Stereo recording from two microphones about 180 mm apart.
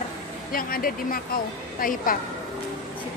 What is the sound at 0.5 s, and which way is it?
Speech, 50° left (ahead or behind).